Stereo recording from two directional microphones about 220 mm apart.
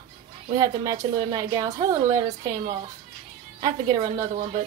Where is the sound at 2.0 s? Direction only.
30° right (ahead or behind).